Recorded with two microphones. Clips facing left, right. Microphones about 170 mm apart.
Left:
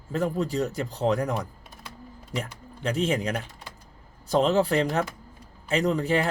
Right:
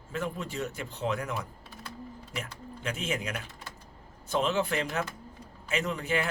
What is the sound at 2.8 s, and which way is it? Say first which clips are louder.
Speech: left 8 dB; 35° left (ahead or behind).